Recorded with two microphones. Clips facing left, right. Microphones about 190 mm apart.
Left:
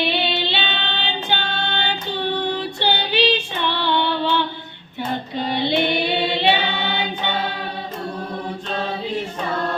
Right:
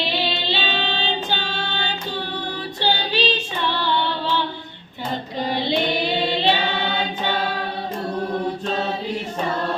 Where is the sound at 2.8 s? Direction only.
60° left (ahead or behind).